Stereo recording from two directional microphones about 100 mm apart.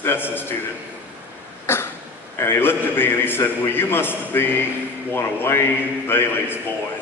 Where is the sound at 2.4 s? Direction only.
20° left (ahead or behind).